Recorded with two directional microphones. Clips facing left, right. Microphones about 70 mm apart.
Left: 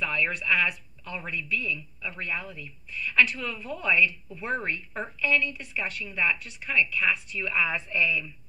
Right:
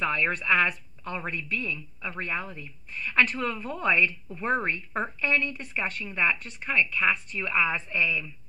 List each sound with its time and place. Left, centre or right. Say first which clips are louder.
0.0 s a woman's voice: right 2 dB; right